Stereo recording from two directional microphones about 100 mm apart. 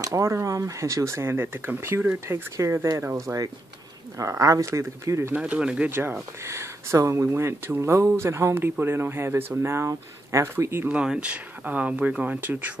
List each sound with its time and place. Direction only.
0.0 s speech: 30° right (ahead or behind)
5.3 s speech: 10° right (ahead or behind)
5.9 s speech: 25° right (ahead or behind)
11.0 s speech: 10° right (ahead or behind)